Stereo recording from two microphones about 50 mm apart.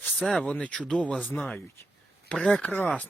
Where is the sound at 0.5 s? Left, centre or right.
Left.